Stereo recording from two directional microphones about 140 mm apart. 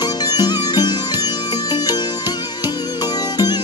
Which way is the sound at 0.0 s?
30° left (ahead or behind).